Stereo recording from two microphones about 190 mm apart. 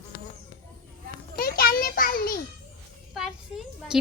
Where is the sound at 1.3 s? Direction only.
50° left (ahead or behind).